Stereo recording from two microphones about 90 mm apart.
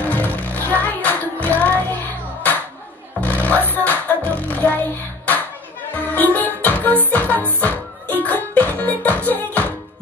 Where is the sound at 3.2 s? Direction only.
15° left (ahead or behind).